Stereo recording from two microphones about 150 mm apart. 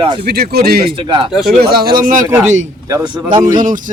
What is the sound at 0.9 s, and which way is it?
Speech, 30° right (ahead or behind).